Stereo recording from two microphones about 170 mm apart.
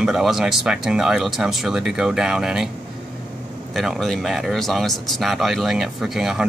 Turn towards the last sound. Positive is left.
turn(degrees=0)  # may be behind; listen again after turning